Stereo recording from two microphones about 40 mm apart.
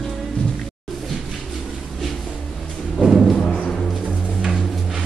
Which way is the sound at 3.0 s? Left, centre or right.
Centre.